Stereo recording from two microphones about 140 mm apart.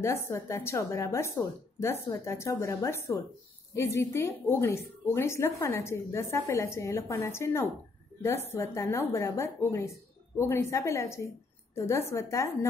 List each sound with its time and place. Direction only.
0.0 s a woman's voice: 20° left (ahead or behind)